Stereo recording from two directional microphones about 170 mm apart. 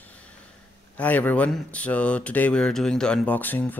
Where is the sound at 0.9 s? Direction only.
10° left (ahead or behind).